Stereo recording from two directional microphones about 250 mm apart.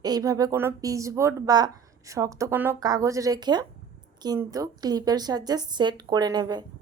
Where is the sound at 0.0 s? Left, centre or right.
Centre.